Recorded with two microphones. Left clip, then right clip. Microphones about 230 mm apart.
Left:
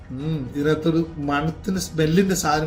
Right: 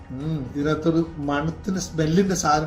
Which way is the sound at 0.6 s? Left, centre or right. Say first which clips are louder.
Left 1 dB; centre.